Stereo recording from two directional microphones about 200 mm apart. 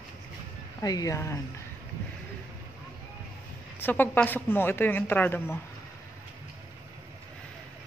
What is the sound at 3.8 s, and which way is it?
Speech, 10° left (ahead or behind).